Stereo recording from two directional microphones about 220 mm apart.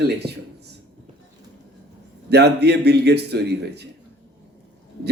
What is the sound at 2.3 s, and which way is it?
A man's voice, 50° right (ahead or behind).